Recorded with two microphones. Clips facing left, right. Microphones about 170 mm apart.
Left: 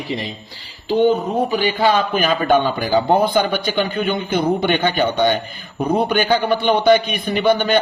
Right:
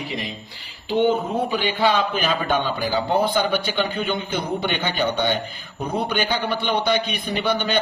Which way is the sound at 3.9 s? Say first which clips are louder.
Left 5 dB; 55° left (ahead or behind).